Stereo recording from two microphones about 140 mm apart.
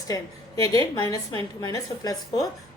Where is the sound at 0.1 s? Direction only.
25° left (ahead or behind).